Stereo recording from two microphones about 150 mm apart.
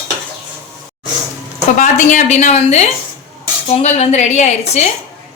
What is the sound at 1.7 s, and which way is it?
A woman's voice, 55° left (ahead or behind).